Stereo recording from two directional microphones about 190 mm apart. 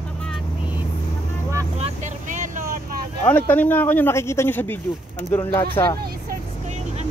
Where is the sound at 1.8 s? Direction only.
40° right (ahead or behind).